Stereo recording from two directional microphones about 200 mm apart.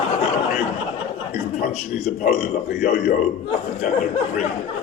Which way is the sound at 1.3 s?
40° left (ahead or behind).